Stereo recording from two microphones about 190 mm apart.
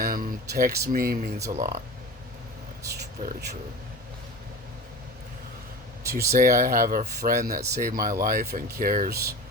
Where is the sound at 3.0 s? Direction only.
60° right (ahead or behind).